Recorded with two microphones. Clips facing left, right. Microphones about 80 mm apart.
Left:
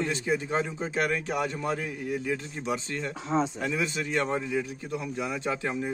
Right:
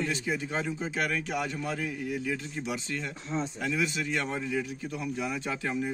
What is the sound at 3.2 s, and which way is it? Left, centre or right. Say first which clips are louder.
Speech: left 7 dB; left.